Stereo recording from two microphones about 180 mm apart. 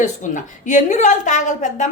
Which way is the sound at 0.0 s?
45° left (ahead or behind).